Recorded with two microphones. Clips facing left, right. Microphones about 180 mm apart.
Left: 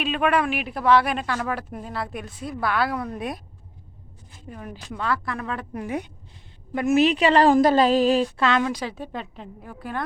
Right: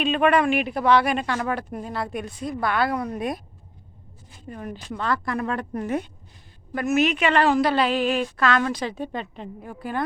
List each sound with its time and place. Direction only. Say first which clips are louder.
0.0 s speech: right 3 dB; 5° left (ahead or behind)
4.4 s speech: right 3 dB; 5° left (ahead or behind)
5.7 s a woman's voice: right 1 dB; 10° left (ahead or behind)
6.7 s a woman's voice: left 2 dB; 30° left (ahead or behind)
8.6 s speech: right 1 dB; 10° left (ahead or behind)